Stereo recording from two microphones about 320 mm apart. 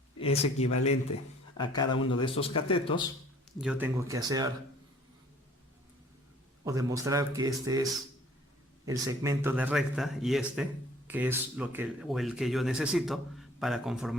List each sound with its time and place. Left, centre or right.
0.2 s speech: centre
1.1 s speech: left
1.5 s speech: centre
3.6 s speech: centre
6.7 s speech: centre
8.9 s speech: centre